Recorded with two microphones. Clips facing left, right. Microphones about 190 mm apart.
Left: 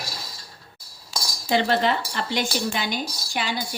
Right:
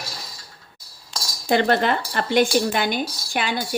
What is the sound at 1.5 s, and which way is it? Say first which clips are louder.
Speech: right 2 dB; 55° right (ahead or behind).